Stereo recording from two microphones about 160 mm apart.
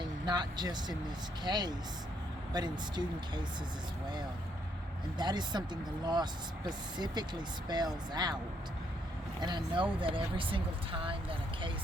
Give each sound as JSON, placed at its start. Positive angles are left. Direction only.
{"t": 0.3, "sound": "speech", "side_deg": -25}
{"t": 5.1, "sound": "speech", "side_deg": -25}
{"t": 6.7, "sound": "speech", "side_deg": -25}
{"t": 9.4, "sound": "speech", "side_deg": -25}